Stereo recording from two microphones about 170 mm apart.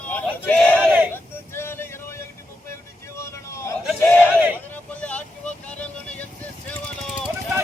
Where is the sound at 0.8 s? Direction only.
10° right (ahead or behind).